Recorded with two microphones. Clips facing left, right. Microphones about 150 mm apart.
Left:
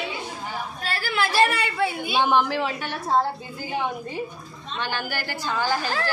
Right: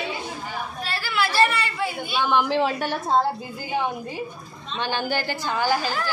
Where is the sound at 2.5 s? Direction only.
35° right (ahead or behind).